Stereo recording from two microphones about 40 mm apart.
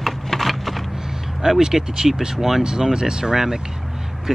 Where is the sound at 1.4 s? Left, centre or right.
Centre.